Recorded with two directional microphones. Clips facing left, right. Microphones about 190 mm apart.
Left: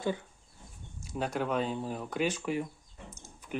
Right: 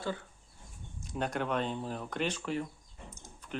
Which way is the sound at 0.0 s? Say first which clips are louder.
Left 4 dB; 15° left (ahead or behind).